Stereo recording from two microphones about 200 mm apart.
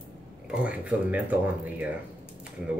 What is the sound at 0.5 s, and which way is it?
Speech, 5° right (ahead or behind).